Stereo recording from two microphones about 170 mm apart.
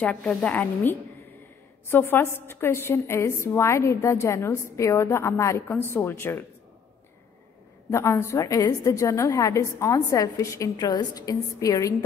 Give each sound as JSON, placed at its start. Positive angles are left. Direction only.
{"t": 0.0, "sound": "a woman's voice", "side_deg": 5}
{"t": 7.9, "sound": "a woman's voice", "side_deg": 15}